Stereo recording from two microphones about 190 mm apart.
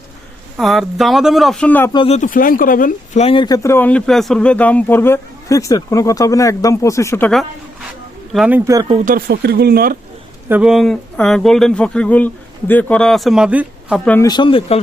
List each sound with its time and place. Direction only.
0.5 s speech: centre (ahead or behind)
1.9 s speech: 25° left (ahead or behind)
2.1 s speech: 45° left (ahead or behind); by 7.3 s 15° left (ahead or behind)
8.3 s speech: 5° right (ahead or behind)
9.0 s speech: 50° right (ahead or behind)
10.5 s speech: 5° right (ahead or behind)
14.0 s speech: 10° left (ahead or behind)
14.3 s speech: 25° left (ahead or behind)